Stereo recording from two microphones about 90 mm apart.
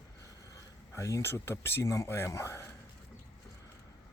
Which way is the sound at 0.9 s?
30° left (ahead or behind).